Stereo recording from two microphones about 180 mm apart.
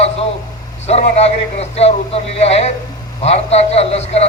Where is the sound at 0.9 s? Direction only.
35° left (ahead or behind).